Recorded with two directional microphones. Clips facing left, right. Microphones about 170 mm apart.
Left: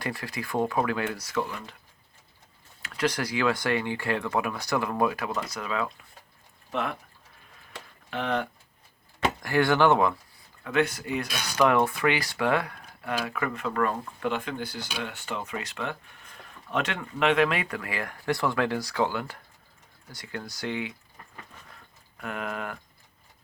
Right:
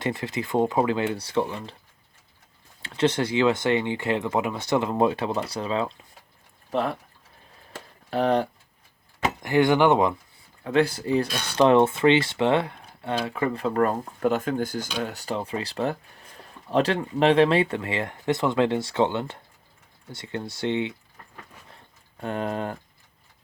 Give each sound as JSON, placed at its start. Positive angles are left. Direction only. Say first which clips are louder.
{"t": 0.0, "sound": "speech", "louder": "right 5 dB", "side_deg": -20}
{"t": 2.8, "sound": "speech", "louder": "right 5 dB", "side_deg": -25}
{"t": 7.7, "sound": "a sound", "louder": "right 6 dB", "side_deg": -40}
{"t": 9.4, "sound": "speech", "louder": "right 3 dB", "side_deg": -20}
{"t": 10.6, "sound": "speech", "louder": "right 4 dB", "side_deg": -30}
{"t": 22.2, "sound": "speech", "louder": "right 5 dB", "side_deg": -30}